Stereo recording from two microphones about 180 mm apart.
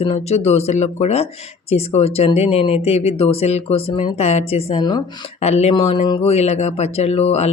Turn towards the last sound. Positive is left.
turn(degrees=35)  # may be behind; listen again after turning